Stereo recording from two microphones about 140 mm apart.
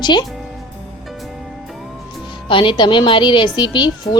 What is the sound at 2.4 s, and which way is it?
A woman's voice, 35° left (ahead or behind).